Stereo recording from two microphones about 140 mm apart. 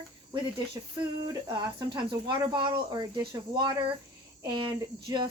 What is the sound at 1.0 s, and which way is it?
Speech, 30° right (ahead or behind).